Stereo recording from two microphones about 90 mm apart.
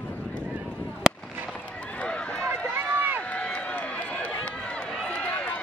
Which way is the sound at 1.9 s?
10° left (ahead or behind).